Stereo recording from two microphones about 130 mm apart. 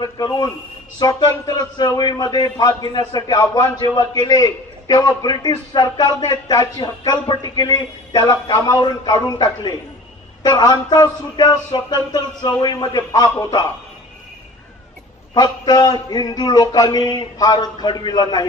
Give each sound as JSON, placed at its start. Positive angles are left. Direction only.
{"t": 0.0, "sound": "a man's voice", "side_deg": 30}
{"t": 15.3, "sound": "a man's voice", "side_deg": 30}